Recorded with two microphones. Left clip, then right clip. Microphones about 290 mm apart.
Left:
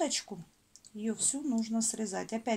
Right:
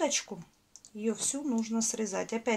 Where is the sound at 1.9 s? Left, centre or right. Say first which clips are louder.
Right 3 dB; left.